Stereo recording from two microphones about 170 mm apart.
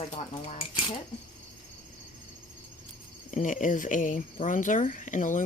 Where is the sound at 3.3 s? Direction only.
45° left (ahead or behind).